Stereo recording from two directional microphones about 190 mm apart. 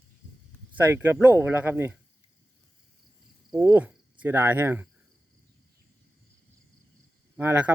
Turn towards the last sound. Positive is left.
turn(degrees=-10)  # may be behind; listen again after turning